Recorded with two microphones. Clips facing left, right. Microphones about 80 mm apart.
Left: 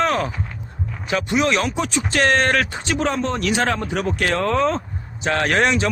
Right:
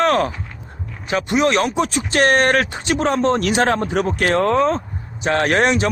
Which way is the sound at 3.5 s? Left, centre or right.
Right.